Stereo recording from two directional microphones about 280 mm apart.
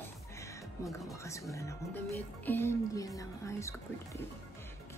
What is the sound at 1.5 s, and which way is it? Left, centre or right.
Speech, centre.